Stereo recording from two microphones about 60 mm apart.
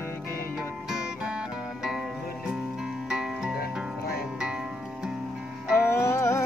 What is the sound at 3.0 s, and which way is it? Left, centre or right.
Music, centre.